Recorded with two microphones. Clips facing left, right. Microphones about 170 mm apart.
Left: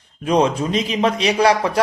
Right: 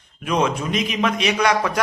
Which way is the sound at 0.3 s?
30° left (ahead or behind).